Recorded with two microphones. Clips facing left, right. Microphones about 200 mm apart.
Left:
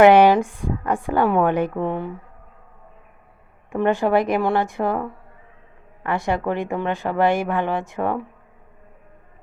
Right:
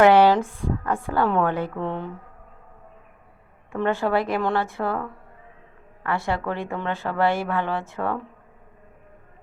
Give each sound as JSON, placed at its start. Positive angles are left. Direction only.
{"t": 0.0, "sound": "speech", "side_deg": 15}
{"t": 3.7, "sound": "speech", "side_deg": 15}